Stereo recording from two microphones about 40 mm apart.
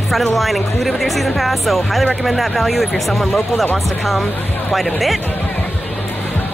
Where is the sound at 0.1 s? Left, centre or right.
Centre.